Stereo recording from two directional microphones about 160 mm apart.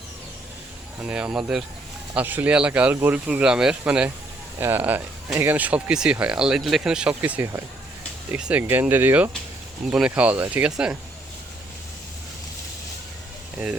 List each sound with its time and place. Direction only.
1.0 s speech: 5° right (ahead or behind)